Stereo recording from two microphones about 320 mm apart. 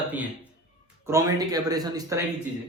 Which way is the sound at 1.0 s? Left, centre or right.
Centre.